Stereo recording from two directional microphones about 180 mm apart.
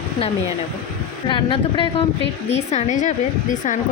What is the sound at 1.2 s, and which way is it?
A woman's voice, 30° left (ahead or behind).